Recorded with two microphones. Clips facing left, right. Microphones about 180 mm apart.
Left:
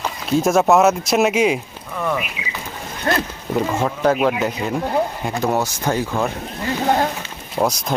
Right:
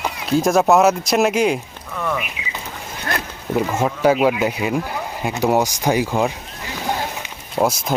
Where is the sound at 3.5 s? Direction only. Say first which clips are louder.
Even; 5° right (ahead or behind).